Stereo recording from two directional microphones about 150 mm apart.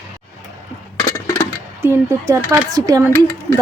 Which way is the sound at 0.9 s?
20° left (ahead or behind).